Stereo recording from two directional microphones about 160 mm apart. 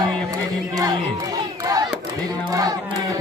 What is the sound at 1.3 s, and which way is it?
Battle cry, 25° right (ahead or behind).